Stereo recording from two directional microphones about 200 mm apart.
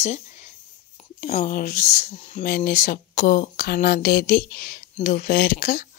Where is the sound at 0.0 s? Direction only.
35° left (ahead or behind).